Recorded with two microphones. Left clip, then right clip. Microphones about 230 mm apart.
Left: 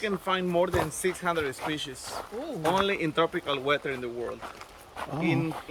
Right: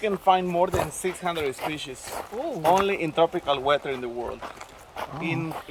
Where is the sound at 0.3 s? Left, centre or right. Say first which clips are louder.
Right 6 dB; centre.